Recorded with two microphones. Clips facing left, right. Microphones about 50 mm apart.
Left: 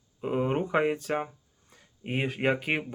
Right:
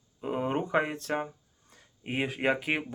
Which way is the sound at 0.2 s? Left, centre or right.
Centre.